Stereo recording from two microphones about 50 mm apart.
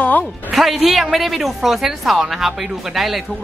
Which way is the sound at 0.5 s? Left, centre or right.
Centre.